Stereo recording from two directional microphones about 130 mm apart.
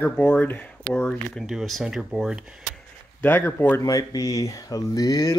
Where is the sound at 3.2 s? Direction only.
15° left (ahead or behind).